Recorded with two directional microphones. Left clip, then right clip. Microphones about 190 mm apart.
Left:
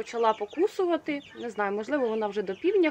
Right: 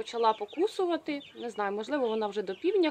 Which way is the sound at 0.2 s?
10° right (ahead or behind).